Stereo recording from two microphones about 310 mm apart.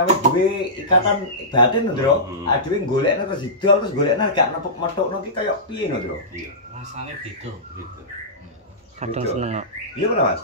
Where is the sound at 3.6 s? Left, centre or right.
Centre.